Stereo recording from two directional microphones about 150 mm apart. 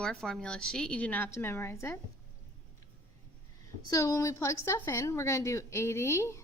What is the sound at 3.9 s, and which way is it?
A woman's voice, 25° left (ahead or behind).